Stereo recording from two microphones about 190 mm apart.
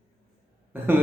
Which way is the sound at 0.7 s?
10° right (ahead or behind).